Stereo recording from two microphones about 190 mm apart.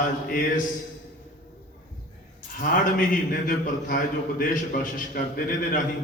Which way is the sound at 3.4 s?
45° left (ahead or behind).